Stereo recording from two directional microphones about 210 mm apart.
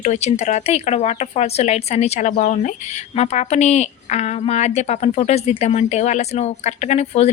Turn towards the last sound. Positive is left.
turn(degrees=30)  # may be behind; listen again after turning